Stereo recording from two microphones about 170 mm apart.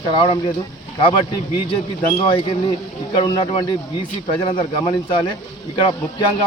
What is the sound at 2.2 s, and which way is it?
Speech, 30° left (ahead or behind).